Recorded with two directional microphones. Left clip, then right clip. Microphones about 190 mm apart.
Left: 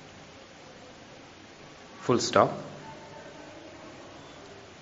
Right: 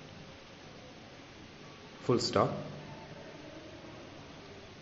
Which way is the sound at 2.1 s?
Centre (ahead or behind).